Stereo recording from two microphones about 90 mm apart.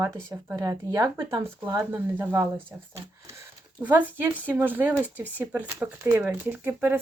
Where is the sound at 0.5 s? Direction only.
45° right (ahead or behind).